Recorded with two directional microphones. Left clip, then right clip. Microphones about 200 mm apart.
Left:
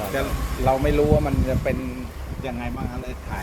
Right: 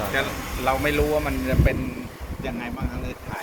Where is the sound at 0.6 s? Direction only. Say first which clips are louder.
Left 2 dB; 60° left (ahead or behind).